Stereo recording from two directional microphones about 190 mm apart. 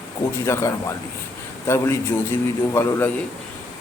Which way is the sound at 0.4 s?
15° left (ahead or behind).